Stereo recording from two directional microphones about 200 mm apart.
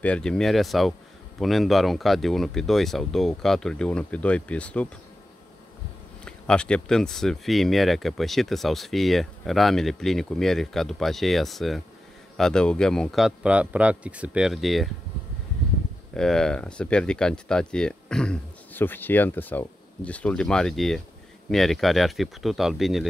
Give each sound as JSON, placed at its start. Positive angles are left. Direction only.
{"t": 0.0, "sound": "speech", "side_deg": 5}
{"t": 6.2, "sound": "speech", "side_deg": 5}
{"t": 16.2, "sound": "speech", "side_deg": 5}